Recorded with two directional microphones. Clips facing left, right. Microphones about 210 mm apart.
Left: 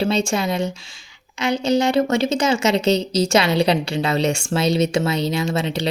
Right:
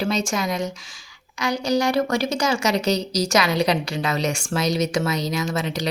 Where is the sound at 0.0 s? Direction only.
30° left (ahead or behind).